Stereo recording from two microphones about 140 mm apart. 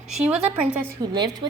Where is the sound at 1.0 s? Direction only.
30° right (ahead or behind).